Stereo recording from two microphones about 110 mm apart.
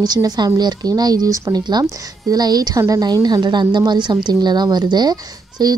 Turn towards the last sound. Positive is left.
turn(degrees=-40)  # may be behind; listen again after turning